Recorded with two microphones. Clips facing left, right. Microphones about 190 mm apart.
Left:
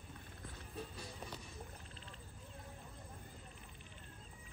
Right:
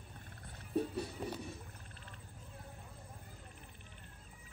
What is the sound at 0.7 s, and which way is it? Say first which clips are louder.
Music: right 13 dB; 60° right (ahead or behind).